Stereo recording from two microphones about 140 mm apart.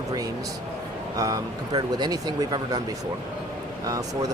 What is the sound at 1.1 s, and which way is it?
Speech, 25° right (ahead or behind).